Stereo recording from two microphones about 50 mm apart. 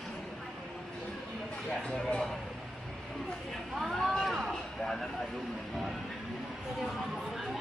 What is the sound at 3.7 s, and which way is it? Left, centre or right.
Vehicle, centre.